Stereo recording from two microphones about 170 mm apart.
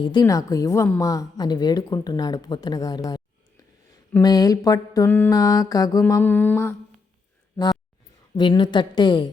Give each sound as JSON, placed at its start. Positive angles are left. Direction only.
{"t": 0.0, "sound": "a woman's voice", "side_deg": 25}
{"t": 4.2, "sound": "a woman's voice", "side_deg": 20}
{"t": 6.1, "sound": "mantra", "side_deg": 15}
{"t": 7.5, "sound": "a sound", "side_deg": 25}
{"t": 8.4, "sound": "a woman's voice", "side_deg": 30}